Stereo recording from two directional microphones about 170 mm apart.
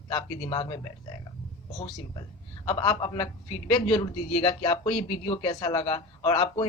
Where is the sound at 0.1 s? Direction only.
25° left (ahead or behind).